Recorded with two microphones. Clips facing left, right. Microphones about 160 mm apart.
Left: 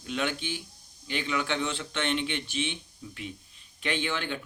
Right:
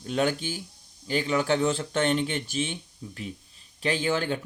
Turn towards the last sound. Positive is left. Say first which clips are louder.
# right 5 dB
turn(degrees=-40)  # may be behind; listen again after turning